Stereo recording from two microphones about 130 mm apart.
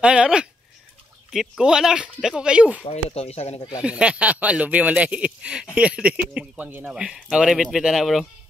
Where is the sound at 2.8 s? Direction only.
55° left (ahead or behind).